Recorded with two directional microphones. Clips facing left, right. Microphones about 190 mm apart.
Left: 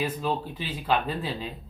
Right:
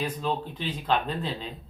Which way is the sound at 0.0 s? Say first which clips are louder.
Left 1 dB; 5° left (ahead or behind).